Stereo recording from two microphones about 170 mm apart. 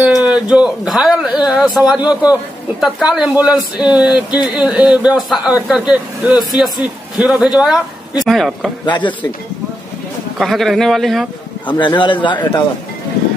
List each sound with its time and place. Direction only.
0.3 s speech: 5° right (ahead or behind)
8.8 s speech: 25° left (ahead or behind)
10.4 s speech: centre (ahead or behind)
11.7 s speech: 25° left (ahead or behind)